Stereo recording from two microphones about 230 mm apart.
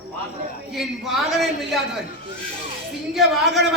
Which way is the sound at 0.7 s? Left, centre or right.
Centre.